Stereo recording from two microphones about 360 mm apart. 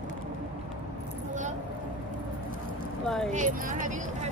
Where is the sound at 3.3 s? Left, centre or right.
Right.